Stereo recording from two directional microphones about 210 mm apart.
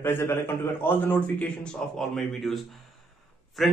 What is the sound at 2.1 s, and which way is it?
Speech, centre (ahead or behind).